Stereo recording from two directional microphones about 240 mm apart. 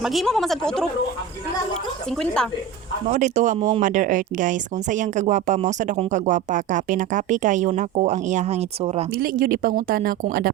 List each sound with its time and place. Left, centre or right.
0.0 s speech: centre
3.1 s speech: right
9.1 s speech: right